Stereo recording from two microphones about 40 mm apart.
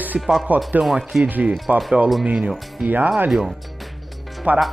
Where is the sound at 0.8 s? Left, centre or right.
Centre.